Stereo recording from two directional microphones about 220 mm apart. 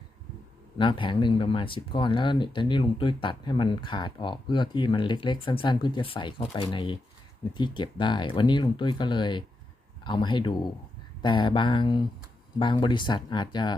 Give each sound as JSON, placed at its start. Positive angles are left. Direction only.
{"t": 0.8, "sound": "speech", "side_deg": 20}